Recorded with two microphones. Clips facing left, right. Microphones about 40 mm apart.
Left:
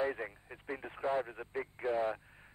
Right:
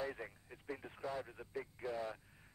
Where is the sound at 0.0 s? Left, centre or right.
Left.